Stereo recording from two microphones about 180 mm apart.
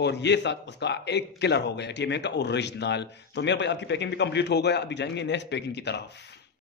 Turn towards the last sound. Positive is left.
turn(degrees=70)  # may be behind; listen again after turning